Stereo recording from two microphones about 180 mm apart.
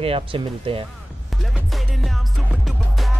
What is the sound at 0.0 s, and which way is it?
Speech, 30° right (ahead or behind).